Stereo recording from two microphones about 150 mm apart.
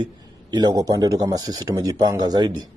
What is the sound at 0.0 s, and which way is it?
Speech, 30° right (ahead or behind).